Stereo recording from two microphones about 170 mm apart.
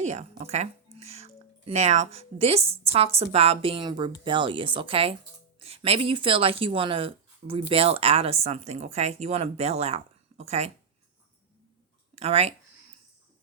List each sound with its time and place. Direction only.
0.0 s speech: 45° right (ahead or behind)
12.1 s speech: 40° right (ahead or behind)